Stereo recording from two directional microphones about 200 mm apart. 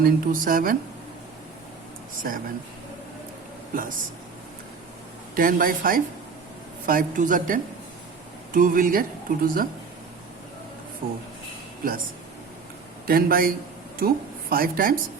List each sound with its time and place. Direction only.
0.0 s speech: 45° right (ahead or behind)
2.3 s speech: 45° right (ahead or behind)
3.8 s speech: 40° right (ahead or behind)
5.3 s speech: 45° right (ahead or behind)
11.0 s speech: 30° right (ahead or behind)
13.1 s speech: 45° right (ahead or behind)